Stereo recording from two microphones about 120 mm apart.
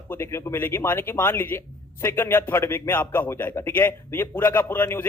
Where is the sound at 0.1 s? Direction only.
20° left (ahead or behind).